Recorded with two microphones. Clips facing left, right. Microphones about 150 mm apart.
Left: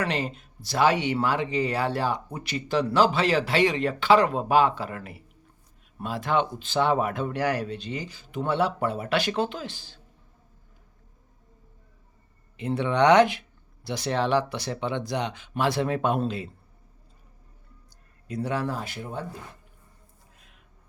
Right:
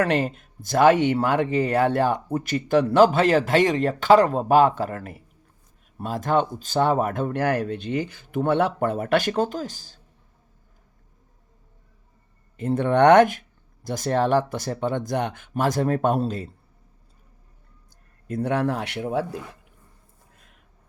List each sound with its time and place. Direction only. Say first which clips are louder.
0.0 s speech: right 6 dB; 50° right (ahead or behind)
12.5 s speech: right 4 dB; 45° right (ahead or behind)
18.3 s speech: right 5 dB; 55° right (ahead or behind); by 19.4 s 90° right